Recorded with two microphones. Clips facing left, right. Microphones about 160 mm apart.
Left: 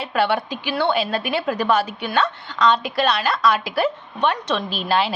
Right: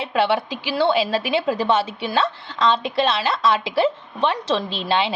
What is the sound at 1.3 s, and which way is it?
A woman's voice, 25° right (ahead or behind).